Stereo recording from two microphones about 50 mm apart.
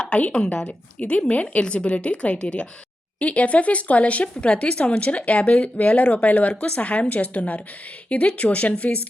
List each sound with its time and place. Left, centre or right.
0.0 s a woman's voice: left